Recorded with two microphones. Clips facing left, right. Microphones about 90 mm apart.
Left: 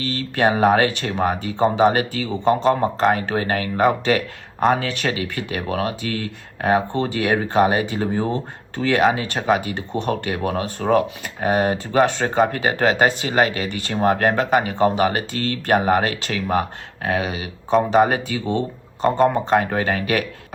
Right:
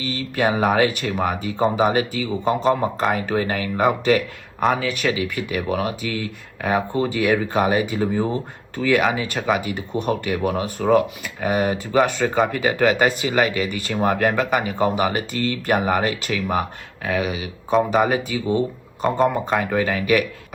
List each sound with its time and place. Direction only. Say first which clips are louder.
0.0 s speech: left 2 dB; 45° left (ahead or behind)
1.9 s speech: even; 45° left (ahead or behind)
2.3 s speech: left 2 dB; 5° right (ahead or behind)
3.0 s speech: left 2 dB; 35° left (ahead or behind)
19.0 s speech: left 2 dB; centre (ahead or behind)
19.3 s speech: left 3 dB; 35° left (ahead or behind)